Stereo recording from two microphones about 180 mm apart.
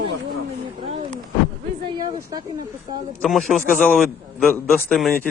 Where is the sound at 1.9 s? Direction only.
20° right (ahead or behind).